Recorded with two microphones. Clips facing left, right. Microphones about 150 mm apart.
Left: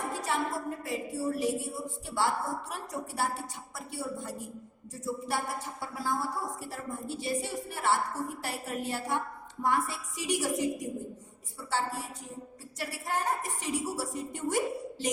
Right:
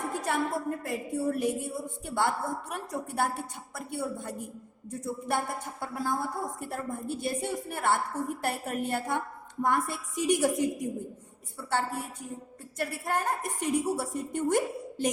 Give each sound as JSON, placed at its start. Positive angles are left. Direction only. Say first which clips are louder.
{"t": 0.1, "sound": "a woman's voice", "louder": "right 3 dB", "side_deg": -55}